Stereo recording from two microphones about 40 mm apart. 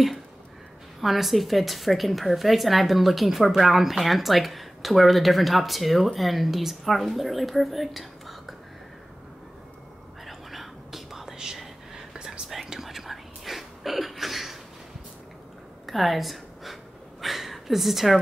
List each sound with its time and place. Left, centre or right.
1.0 s speech: centre
10.2 s whispering: centre; by 12.4 s right
12.6 s whispering: centre
15.9 s a sound: centre